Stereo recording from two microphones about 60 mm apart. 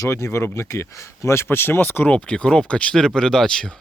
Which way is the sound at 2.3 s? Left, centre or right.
Centre.